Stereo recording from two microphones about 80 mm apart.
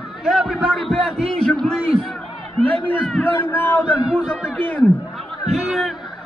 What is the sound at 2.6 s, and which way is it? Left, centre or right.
Speech, centre.